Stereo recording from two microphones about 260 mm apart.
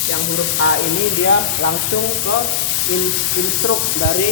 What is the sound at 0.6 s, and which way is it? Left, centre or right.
Sizzle, left.